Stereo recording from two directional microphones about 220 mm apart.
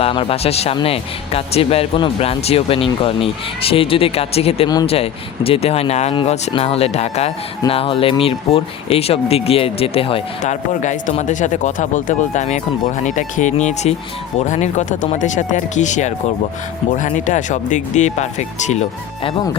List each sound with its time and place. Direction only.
0.0 s speech: 25° left (ahead or behind)